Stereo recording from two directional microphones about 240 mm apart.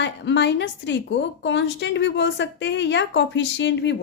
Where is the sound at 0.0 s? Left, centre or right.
Left.